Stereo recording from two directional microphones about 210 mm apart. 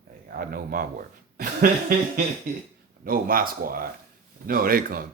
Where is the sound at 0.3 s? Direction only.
45° right (ahead or behind).